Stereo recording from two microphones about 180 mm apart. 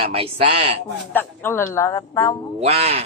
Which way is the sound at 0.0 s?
30° right (ahead or behind).